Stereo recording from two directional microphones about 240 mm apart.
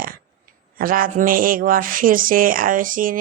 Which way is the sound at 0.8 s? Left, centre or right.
Right.